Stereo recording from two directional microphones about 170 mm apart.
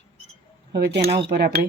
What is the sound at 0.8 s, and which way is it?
Speech, 75° right (ahead or behind).